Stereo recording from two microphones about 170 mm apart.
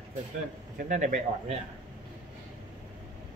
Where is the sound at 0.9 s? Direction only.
45° right (ahead or behind).